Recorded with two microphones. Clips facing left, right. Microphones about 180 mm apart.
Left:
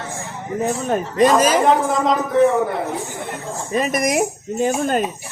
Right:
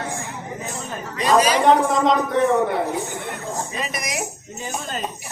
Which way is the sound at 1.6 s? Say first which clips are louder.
Even; centre (ahead or behind).